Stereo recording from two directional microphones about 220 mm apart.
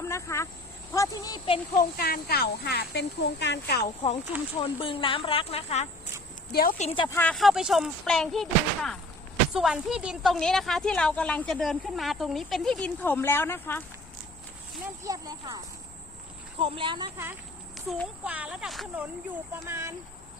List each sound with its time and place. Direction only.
0.0 s cricket: 15° left (ahead or behind)
0.9 s speech: 15° left (ahead or behind)
1.8 s speech: 45° left (ahead or behind)
3.8 s speech: 30° left (ahead or behind)
6.5 s speech: 40° left (ahead or behind); by 7.2 s 20° left (ahead or behind)
7.2 s speech: 5° left (ahead or behind)
15.0 s speech: 15° right (ahead or behind)
17.7 s speech: centre (ahead or behind)
19.6 s speech: 10° right (ahead or behind)